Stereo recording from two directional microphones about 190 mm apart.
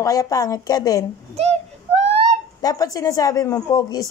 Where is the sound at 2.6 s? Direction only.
20° left (ahead or behind).